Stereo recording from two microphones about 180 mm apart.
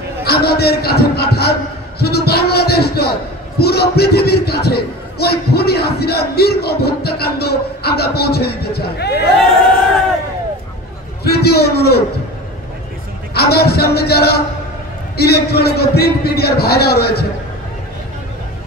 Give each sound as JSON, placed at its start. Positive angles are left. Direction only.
{"t": 0.2, "sound": "a man's voice", "side_deg": 60}
{"t": 11.2, "sound": "a man's voice", "side_deg": 60}
{"t": 13.3, "sound": "a man's voice", "side_deg": 60}